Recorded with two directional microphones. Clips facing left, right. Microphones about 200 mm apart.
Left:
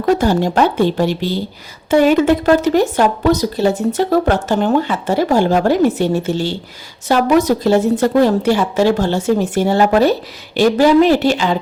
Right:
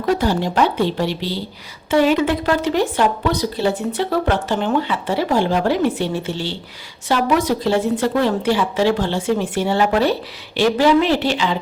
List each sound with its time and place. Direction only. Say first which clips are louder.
0.2 s speech: left 4 dB; 45° left (ahead or behind)